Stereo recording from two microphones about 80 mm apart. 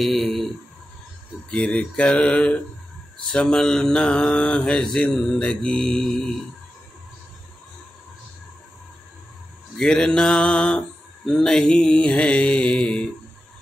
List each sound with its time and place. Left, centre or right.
0.0 s a sound: centre
1.5 s mantra: centre
9.8 s mantra: centre